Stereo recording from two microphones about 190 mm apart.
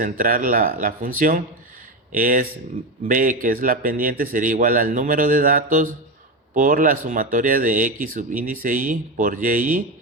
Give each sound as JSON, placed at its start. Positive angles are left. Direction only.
{"t": 0.0, "sound": "speech", "side_deg": -45}